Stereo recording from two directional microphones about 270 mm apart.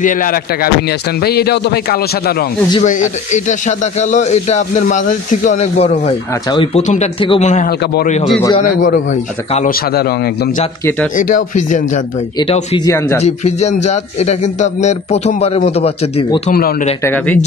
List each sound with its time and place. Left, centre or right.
0.0 s speech: left
8.4 s speech: centre
8.7 s speech: left; by 13.2 s centre
13.2 s speech: left
16.5 s speech: left
17.0 s speech: centre